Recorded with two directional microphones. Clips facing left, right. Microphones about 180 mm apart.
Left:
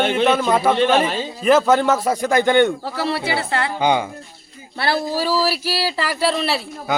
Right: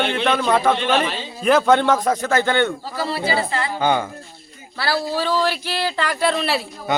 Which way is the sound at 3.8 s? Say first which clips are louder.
Even; 15° left (ahead or behind).